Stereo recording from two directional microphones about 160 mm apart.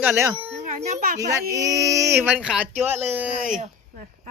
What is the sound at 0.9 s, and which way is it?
Speech, 55° right (ahead or behind).